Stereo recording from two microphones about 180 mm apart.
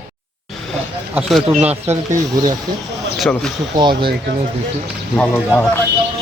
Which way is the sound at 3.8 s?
25° right (ahead or behind).